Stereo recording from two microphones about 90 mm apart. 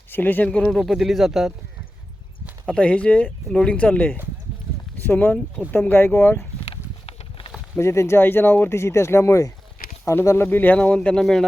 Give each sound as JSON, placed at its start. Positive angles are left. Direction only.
{"t": 0.1, "sound": "speech", "side_deg": 20}
{"t": 2.6, "sound": "speech", "side_deg": 15}
{"t": 7.8, "sound": "speech", "side_deg": 30}